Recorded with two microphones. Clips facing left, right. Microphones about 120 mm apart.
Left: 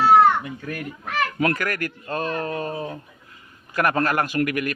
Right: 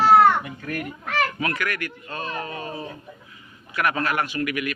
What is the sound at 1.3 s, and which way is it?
Speech, 45° left (ahead or behind).